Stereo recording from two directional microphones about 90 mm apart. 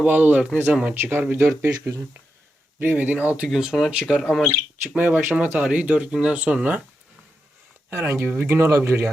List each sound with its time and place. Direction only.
0.0 s speech: 15° right (ahead or behind)
3.5 s speech: 5° right (ahead or behind)
4.8 s speech: 20° right (ahead or behind)
7.9 s speech: 30° right (ahead or behind)